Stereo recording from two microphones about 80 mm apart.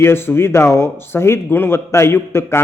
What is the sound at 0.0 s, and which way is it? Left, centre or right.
A man's voice, left.